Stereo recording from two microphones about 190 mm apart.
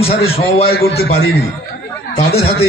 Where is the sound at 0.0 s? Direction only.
30° left (ahead or behind).